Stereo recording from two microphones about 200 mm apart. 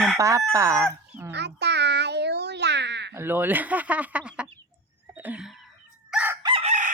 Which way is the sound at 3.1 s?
10° right (ahead or behind).